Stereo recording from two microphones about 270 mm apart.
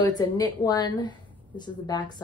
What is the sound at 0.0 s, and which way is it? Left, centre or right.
Speech, centre.